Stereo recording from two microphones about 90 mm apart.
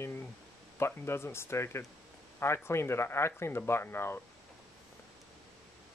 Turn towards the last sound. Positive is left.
turn(degrees=25)  # may be behind; listen again after turning